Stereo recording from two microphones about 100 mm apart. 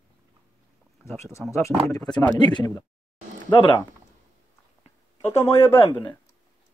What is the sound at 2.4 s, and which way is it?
Speech, 50° left (ahead or behind).